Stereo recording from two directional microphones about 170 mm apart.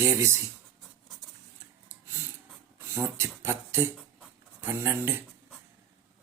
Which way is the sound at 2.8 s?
15° right (ahead or behind).